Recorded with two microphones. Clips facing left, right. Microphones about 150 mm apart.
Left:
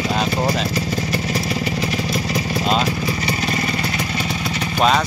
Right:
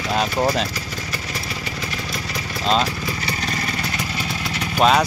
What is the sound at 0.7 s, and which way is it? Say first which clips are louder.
Motorcycle: left 9 dB; 35° left (ahead or behind).